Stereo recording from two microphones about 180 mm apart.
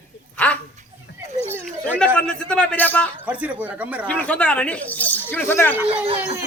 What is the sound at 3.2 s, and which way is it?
Speech, 10° right (ahead or behind).